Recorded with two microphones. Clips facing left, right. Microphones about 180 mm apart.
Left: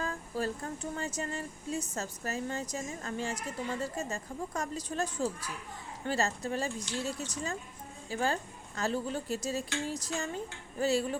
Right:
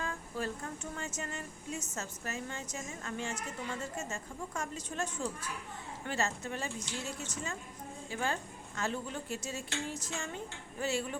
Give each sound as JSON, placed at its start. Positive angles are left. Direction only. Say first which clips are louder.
{"t": 0.0, "sound": "speech", "louder": "left 3 dB", "side_deg": 35}